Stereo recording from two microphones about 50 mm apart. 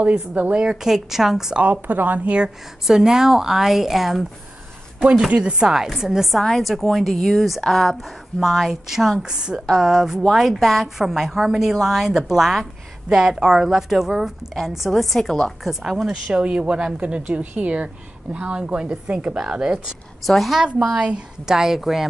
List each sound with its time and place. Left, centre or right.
0.0 s a woman's voice: right
0.7 s a woman's voice: centre
1.6 s speech: right
2.9 s a woman's voice: centre
5.3 s a woman's voice: centre
6.4 s a woman's voice: centre
16.1 s a woman's voice: centre
20.2 s a woman's voice: centre